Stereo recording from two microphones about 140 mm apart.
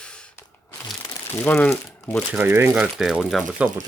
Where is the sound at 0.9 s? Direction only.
20° left (ahead or behind).